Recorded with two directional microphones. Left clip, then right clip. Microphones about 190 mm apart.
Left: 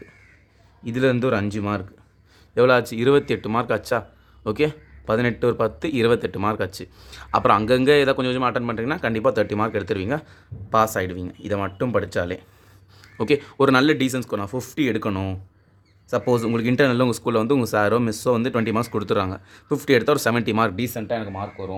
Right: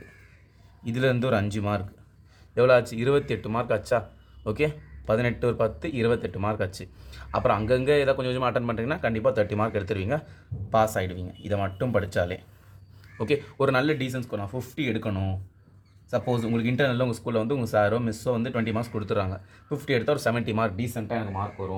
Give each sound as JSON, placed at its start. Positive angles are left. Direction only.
{"t": 0.9, "sound": "speech", "side_deg": 25}
{"t": 20.7, "sound": "speech", "side_deg": 45}